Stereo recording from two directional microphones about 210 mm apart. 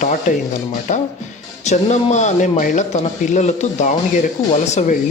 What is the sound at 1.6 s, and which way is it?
Speech, 35° left (ahead or behind).